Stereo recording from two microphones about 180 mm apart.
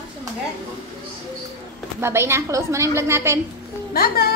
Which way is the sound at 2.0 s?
15° right (ahead or behind).